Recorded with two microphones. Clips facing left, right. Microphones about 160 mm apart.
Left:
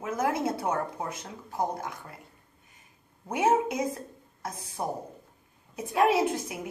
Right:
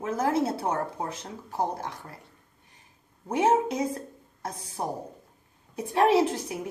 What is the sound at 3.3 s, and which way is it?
A woman's voice, 30° right (ahead or behind).